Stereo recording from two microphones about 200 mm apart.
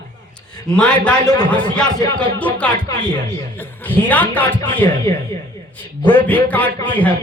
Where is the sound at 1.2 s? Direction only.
20° left (ahead or behind).